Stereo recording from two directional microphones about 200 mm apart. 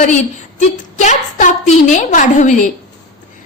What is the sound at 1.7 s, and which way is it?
A woman's voice, 35° left (ahead or behind).